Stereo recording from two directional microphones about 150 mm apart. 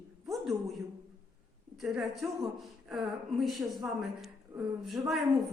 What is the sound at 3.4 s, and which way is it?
Speech, centre (ahead or behind).